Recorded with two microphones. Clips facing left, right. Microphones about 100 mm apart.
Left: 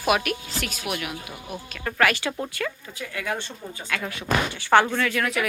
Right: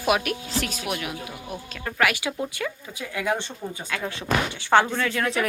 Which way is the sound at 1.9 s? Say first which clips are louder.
Left 1 dB; 15° right (ahead or behind).